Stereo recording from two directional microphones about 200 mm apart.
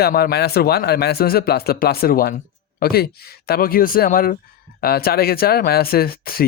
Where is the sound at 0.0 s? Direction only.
50° left (ahead or behind).